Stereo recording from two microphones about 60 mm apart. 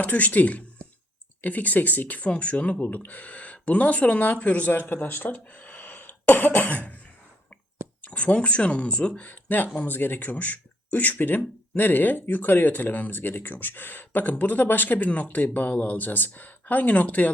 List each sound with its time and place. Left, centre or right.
0.0 s speech: left
8.0 s speech: left
9.3 s speech: left